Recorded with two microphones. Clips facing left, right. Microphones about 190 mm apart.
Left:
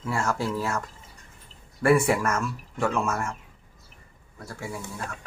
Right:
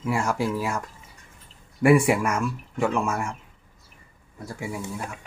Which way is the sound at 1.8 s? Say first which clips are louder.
Right 3 dB; 15° right (ahead or behind).